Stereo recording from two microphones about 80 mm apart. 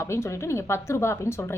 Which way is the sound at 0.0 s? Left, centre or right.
Left.